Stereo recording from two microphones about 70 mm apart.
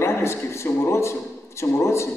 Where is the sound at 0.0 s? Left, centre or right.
Left.